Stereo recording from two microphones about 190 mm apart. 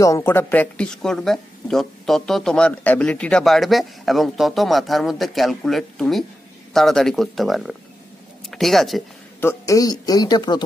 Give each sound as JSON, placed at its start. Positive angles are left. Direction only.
{"t": 0.0, "sound": "speech", "side_deg": 15}
{"t": 9.4, "sound": "speech", "side_deg": 15}